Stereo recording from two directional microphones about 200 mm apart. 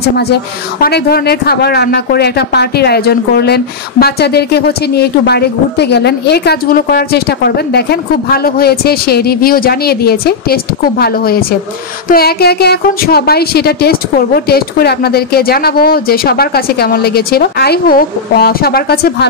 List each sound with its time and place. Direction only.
0.2 s a woman's voice: 50° left (ahead or behind)